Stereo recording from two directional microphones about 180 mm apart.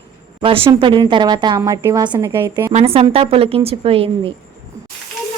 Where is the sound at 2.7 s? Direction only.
35° right (ahead or behind).